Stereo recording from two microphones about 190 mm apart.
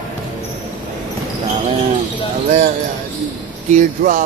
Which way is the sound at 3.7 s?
40° right (ahead or behind).